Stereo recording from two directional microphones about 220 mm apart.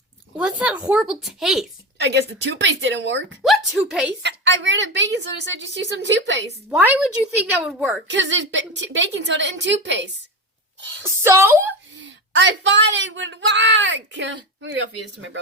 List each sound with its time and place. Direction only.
0.3 s a woman's voice: 5° right (ahead or behind)
2.0 s a woman's voice: 50° right (ahead or behind)
3.4 s a woman's voice: centre (ahead or behind)
4.2 s a woman's voice: 55° right (ahead or behind)
6.7 s a woman's voice: 5° right (ahead or behind)
8.1 s a woman's voice: 55° right (ahead or behind)
11.0 s speech: 10° right (ahead or behind)
11.9 s speech: 55° right (ahead or behind)